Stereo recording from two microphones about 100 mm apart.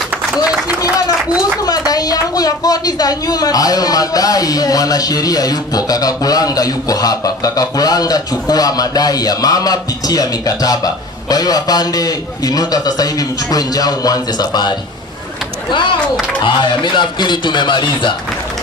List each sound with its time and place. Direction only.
1.9 s a woman's voice: 40° left (ahead or behind)
16.4 s speech: 50° left (ahead or behind)